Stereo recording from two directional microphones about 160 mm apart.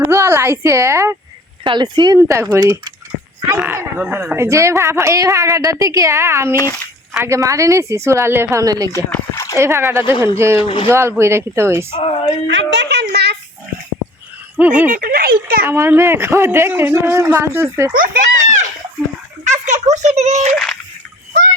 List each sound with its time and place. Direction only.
0.0 s a woman's voice: 15° right (ahead or behind)
1.6 s a woman's voice: 30° right (ahead or behind)
2.1 s a woman's voice: 15° right (ahead or behind)
8.9 s speech: 15° left (ahead or behind)
9.6 s a woman's voice: 15° right (ahead or behind)
10.6 s speech: 35° left (ahead or behind)
10.8 s a woman's voice: 15° right (ahead or behind)
11.9 s speech: 40° left (ahead or behind)
12.5 s speech: 90° right
14.6 s a woman's voice: 10° right (ahead or behind)
14.8 s speech: 60° right (ahead or behind)
15.6 s a woman's voice: 15° right (ahead or behind)
17.9 s speech: 60° right (ahead or behind)
19.5 s a child's voice: 50° right (ahead or behind)